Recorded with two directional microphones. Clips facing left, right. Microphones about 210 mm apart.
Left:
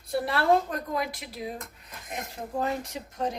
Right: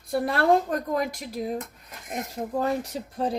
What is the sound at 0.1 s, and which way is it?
A woman's voice, 50° right (ahead or behind).